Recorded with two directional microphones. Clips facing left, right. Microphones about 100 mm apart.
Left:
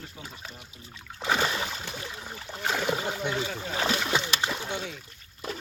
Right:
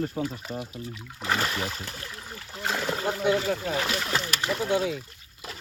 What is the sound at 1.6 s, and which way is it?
Rowboat, centre (ahead or behind).